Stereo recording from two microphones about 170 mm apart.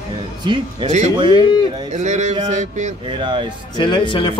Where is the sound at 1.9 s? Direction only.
45° right (ahead or behind).